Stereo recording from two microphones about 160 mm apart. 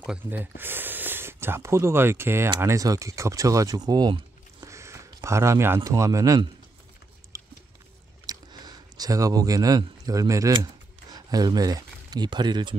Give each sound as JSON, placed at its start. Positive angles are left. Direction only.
{"t": 0.0, "sound": "speech", "side_deg": -10}
{"t": 7.3, "sound": "a sound", "side_deg": -20}
{"t": 8.3, "sound": "speech", "side_deg": -25}